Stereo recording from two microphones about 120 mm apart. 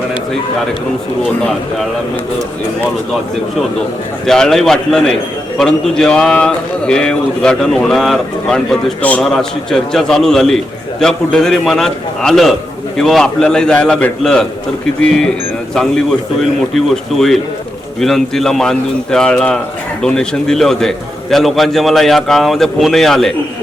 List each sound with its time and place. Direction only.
1.4 s a man's voice: 5° left (ahead or behind)
4.3 s a man's voice: 5° left (ahead or behind)